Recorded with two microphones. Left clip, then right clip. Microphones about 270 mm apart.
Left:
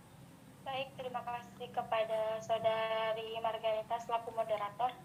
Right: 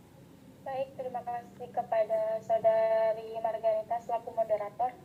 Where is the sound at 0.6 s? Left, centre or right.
Left.